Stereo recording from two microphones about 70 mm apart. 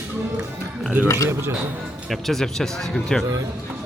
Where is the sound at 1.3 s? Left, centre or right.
Right.